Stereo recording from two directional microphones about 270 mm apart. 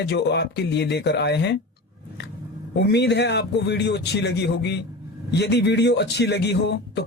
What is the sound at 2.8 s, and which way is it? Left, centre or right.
A man's voice, left.